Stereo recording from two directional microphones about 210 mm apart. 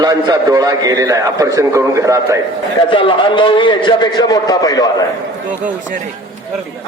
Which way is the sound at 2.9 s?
25° left (ahead or behind).